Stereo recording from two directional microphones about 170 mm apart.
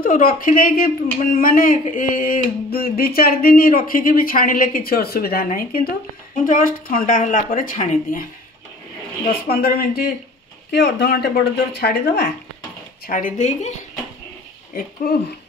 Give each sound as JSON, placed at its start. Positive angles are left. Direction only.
{"t": 0.0, "sound": "speech", "side_deg": 55}
{"t": 9.5, "sound": "speech", "side_deg": 65}
{"t": 10.7, "sound": "speech", "side_deg": 85}
{"t": 13.0, "sound": "speech", "side_deg": 50}